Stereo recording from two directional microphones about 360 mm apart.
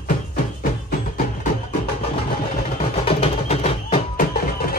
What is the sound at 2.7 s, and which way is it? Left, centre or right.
Music, centre.